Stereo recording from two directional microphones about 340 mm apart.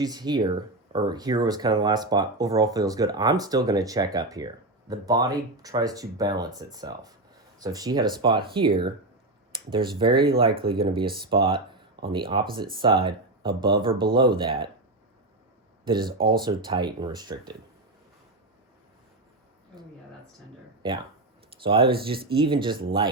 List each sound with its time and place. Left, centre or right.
0.0 s speech: centre
15.9 s speech: centre
20.8 s speech: centre